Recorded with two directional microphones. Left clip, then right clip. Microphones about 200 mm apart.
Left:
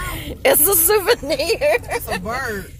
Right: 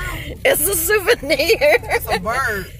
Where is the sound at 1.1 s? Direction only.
5° right (ahead or behind).